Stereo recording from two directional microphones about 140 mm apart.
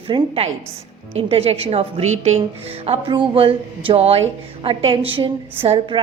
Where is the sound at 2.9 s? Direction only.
35° right (ahead or behind).